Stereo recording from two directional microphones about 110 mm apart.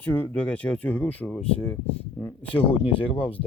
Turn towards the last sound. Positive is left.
turn(degrees=55)  # may be behind; listen again after turning